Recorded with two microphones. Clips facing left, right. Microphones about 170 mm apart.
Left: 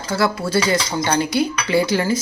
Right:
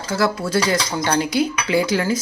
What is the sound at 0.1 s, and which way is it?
Speech, centre (ahead or behind).